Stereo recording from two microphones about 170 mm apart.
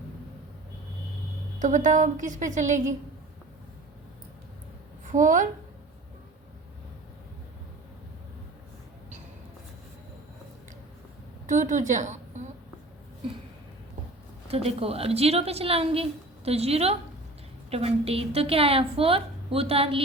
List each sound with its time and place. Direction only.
1.5 s a woman's voice: 50° right (ahead or behind)
5.1 s a woman's voice: 50° right (ahead or behind)
11.4 s a woman's voice: 50° right (ahead or behind)
14.4 s a woman's voice: 35° right (ahead or behind)